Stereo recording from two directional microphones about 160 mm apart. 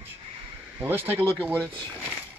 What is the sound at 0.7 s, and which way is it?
Speech, 15° right (ahead or behind).